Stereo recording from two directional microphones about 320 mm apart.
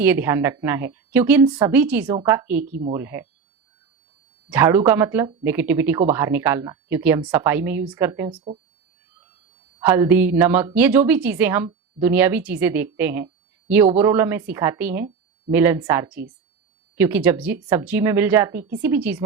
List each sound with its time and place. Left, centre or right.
0.0 s speech: centre
4.4 s speech: centre
9.8 s a woman's voice: centre